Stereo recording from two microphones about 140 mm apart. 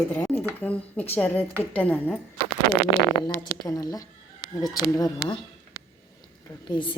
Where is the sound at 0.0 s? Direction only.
15° left (ahead or behind).